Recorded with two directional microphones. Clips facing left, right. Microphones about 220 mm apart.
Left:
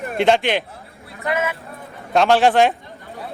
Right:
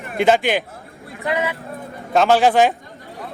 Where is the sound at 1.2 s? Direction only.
15° right (ahead or behind).